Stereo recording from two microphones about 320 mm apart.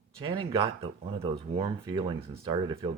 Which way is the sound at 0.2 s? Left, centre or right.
Centre.